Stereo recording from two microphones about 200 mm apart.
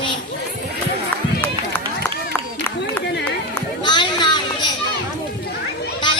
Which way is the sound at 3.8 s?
20° left (ahead or behind).